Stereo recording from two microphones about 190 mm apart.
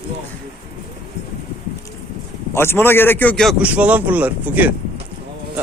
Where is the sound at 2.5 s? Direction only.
10° left (ahead or behind); by 4.7 s 10° right (ahead or behind).